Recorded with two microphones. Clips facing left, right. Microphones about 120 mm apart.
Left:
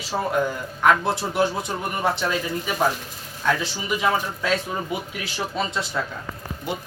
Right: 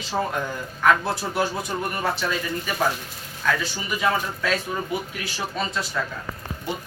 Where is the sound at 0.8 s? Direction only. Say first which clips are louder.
Left 1 dB; 20° left (ahead or behind).